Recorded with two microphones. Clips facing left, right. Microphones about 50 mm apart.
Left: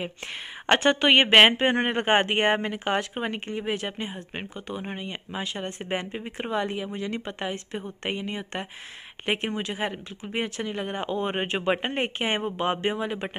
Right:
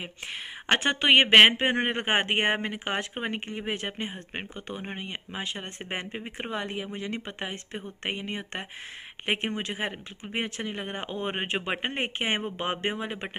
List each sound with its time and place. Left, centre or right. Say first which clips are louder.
0.7 s speech: left 3 dB; centre
12.2 s speech: left 3 dB; right